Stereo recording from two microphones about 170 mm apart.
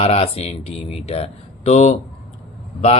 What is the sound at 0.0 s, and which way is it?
Speech, 40° left (ahead or behind).